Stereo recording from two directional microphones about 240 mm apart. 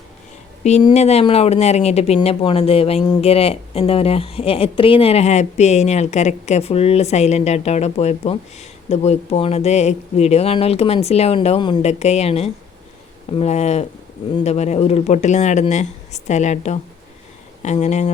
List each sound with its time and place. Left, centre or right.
0.6 s speech: left